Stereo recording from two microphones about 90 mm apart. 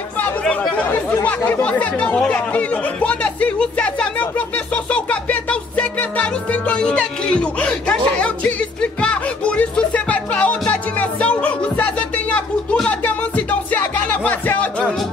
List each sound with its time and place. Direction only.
0.2 s speech: 15° left (ahead or behind)
4.9 s music: 15° left (ahead or behind)
6.7 s speech: 10° left (ahead or behind)
9.0 s music: 15° left (ahead or behind)